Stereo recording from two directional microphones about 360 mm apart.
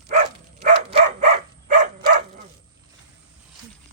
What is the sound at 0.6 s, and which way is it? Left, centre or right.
Dog, centre.